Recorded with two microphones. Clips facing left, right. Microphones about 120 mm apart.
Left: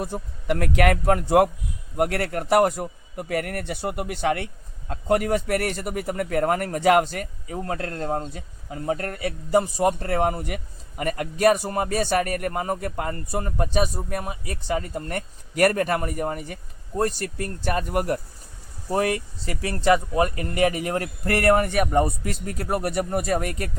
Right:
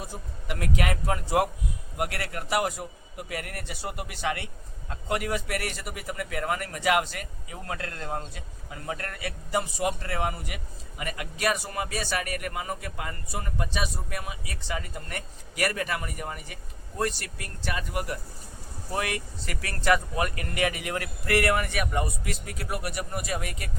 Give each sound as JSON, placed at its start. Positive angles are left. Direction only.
{"t": 0.0, "sound": "a man's voice", "side_deg": 55}
{"t": 18.9, "sound": "speech", "side_deg": 35}